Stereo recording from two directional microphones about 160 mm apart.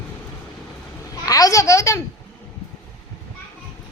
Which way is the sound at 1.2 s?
20° left (ahead or behind).